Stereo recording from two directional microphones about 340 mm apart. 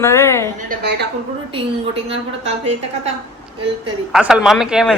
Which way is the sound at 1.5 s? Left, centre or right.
Centre.